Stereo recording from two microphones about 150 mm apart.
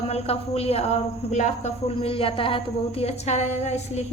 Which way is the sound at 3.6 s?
45° left (ahead or behind).